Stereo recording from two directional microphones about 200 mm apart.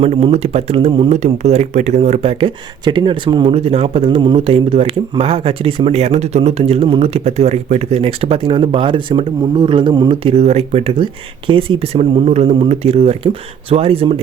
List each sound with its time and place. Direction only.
0.0 s speech: 30° right (ahead or behind)